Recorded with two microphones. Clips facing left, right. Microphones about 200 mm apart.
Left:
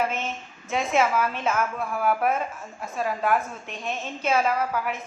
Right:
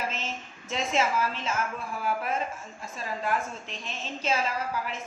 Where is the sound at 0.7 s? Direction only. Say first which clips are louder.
Left 4 dB; 55° left (ahead or behind).